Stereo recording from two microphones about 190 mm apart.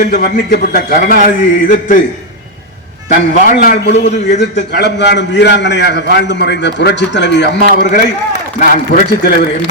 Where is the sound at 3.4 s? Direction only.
50° left (ahead or behind).